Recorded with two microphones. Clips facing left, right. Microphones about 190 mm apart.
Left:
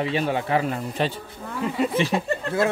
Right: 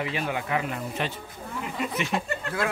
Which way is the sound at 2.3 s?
30° left (ahead or behind).